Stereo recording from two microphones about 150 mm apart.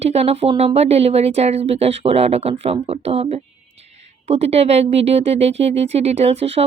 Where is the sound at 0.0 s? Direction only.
45° right (ahead or behind).